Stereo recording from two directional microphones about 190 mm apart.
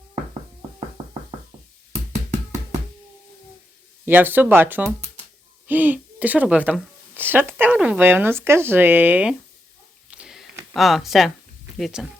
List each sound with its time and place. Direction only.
4.0 s speech: 10° right (ahead or behind)
10.1 s a sound: 5° right (ahead or behind)
10.8 s speech: centre (ahead or behind)